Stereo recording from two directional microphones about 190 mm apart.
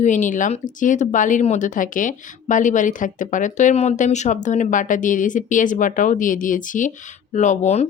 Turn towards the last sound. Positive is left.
turn(degrees=35)  # may be behind; listen again after turning